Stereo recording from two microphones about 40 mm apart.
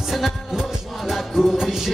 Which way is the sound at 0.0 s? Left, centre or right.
Centre.